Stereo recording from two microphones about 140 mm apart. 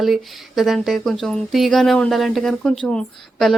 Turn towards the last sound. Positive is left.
turn(degrees=5)  # may be behind; listen again after turning